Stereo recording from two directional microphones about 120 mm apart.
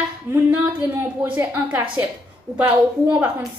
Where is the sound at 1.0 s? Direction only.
15° right (ahead or behind).